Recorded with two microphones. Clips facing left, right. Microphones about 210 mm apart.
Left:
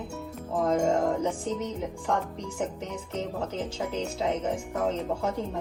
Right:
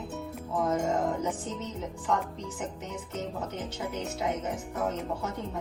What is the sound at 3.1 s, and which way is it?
A woman's voice, 30° left (ahead or behind).